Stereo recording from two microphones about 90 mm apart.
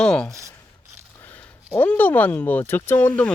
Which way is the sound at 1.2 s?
20° left (ahead or behind).